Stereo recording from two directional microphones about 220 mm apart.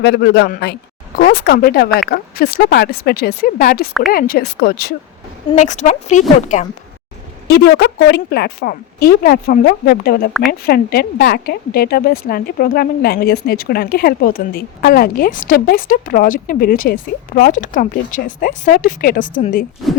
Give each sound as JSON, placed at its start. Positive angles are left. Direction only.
{"t": 0.0, "sound": "a woman's voice", "side_deg": 50}
{"t": 5.5, "sound": "speech", "side_deg": 35}
{"t": 7.4, "sound": "a woman's voice", "side_deg": 45}